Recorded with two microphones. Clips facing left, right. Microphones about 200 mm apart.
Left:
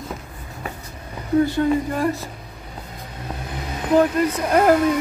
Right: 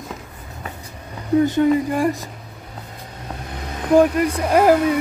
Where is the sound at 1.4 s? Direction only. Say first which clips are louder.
Right 3 dB; 15° right (ahead or behind).